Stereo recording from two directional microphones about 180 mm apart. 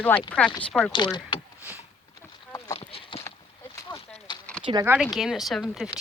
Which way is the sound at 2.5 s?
20° left (ahead or behind).